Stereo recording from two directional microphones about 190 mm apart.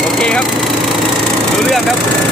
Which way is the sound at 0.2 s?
5° left (ahead or behind).